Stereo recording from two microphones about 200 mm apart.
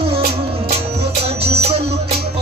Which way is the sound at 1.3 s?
30° right (ahead or behind).